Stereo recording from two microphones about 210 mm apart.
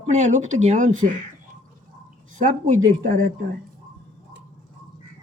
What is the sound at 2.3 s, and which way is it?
Speech, 35° right (ahead or behind).